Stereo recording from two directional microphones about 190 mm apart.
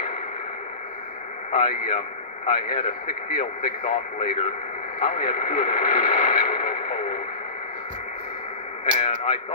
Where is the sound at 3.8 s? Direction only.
35° left (ahead or behind).